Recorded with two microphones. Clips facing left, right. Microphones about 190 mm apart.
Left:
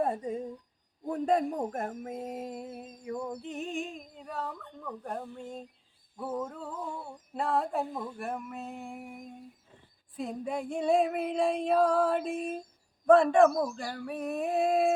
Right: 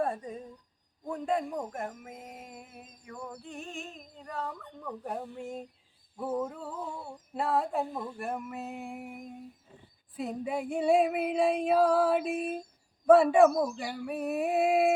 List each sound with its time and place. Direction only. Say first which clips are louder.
0.0 s speech: left 2 dB; 25° left (ahead or behind)
1.0 s speech: left 4 dB; 40° left (ahead or behind)
3.1 s a sound: left 7 dB; 20° left (ahead or behind); by 9.3 s centre (ahead or behind)
10.2 s female singing: right 1 dB; 5° right (ahead or behind)